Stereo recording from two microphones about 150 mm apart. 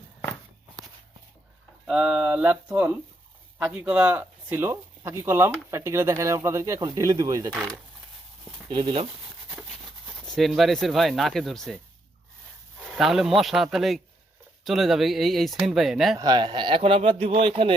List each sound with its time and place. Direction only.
1.9 s speech: 5° right (ahead or behind); by 7.5 s 25° right (ahead or behind)
7.5 s speech: centre (ahead or behind)
8.7 s a man's voice: 35° right (ahead or behind)
10.1 s speech: centre (ahead or behind)
12.9 s speech: centre (ahead or behind)
16.1 s a man's voice: 30° right (ahead or behind)